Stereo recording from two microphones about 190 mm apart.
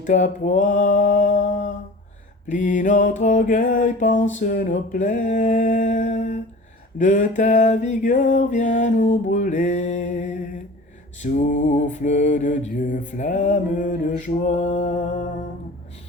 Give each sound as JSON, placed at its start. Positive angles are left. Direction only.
{"t": 0.0, "sound": "mantra", "side_deg": 40}
{"t": 2.5, "sound": "mantra", "side_deg": 40}